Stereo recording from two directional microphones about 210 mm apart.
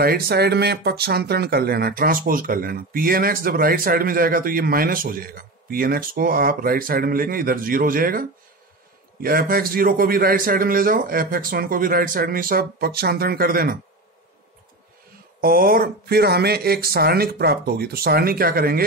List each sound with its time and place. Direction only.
0.0 s speech: 50° right (ahead or behind)
15.4 s speech: 45° right (ahead or behind)